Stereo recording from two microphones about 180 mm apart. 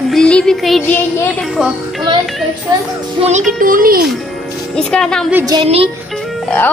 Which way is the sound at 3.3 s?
45° right (ahead or behind).